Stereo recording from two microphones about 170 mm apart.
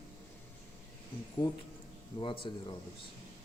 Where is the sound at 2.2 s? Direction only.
30° left (ahead or behind).